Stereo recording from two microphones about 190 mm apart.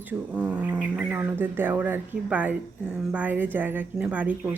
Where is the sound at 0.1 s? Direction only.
5° right (ahead or behind).